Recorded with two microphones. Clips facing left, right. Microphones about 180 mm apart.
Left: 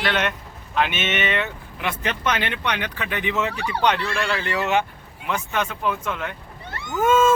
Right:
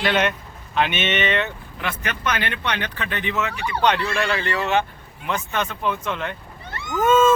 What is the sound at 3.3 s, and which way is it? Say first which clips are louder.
Speech: even; 30° left (ahead or behind).